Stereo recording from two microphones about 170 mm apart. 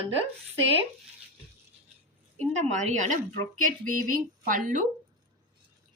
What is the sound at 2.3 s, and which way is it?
A woman's voice, 45° right (ahead or behind).